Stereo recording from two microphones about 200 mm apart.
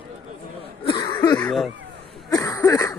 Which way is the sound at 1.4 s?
Centre (ahead or behind).